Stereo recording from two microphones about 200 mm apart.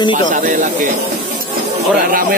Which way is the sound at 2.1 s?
45° right (ahead or behind).